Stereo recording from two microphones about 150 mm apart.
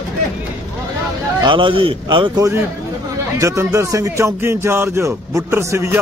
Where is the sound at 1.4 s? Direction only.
35° right (ahead or behind).